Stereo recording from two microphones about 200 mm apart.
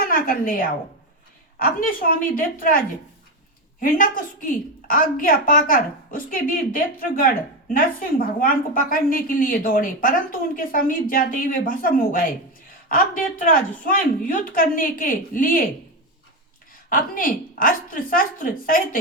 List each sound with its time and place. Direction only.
0.1 s a woman's voice: 45° left (ahead or behind)
13.4 s a woman's voice: 45° left (ahead or behind)
16.9 s a woman's voice: 45° left (ahead or behind)